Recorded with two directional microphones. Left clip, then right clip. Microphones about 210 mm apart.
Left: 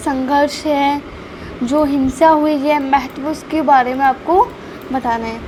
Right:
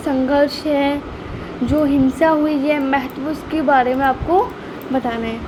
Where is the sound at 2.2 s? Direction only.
15° left (ahead or behind).